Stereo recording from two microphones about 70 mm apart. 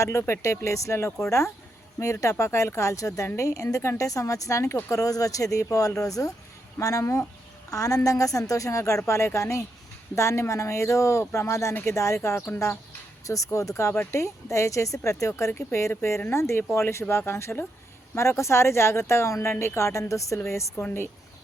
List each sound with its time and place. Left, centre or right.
0.0 s a woman's voice: left
4.9 s a woman's voice: left
7.7 s a woman's voice: left
15.9 s speech: left
20.7 s speech: left